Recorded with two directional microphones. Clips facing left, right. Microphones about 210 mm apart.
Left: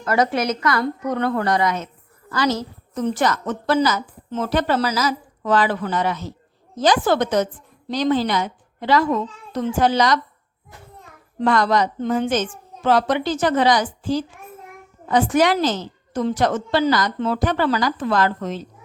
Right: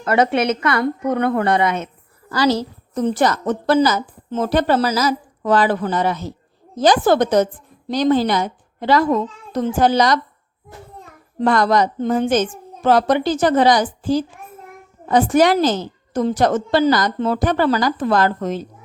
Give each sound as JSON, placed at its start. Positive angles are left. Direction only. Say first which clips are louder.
{"t": 0.0, "sound": "a woman's voice", "louder": "right 3 dB", "side_deg": -25}
{"t": 11.3, "sound": "a woman's voice", "louder": "right 2 dB", "side_deg": -40}
{"t": 15.0, "sound": "a woman's voice", "louder": "right 3 dB", "side_deg": -40}